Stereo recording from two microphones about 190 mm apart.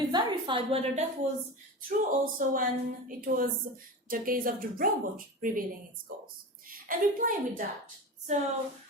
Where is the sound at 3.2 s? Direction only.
50° right (ahead or behind).